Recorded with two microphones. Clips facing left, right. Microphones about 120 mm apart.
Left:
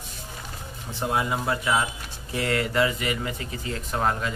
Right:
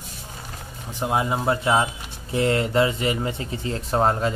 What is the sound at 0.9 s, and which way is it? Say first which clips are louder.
Speech: right 3 dB; 20° right (ahead or behind).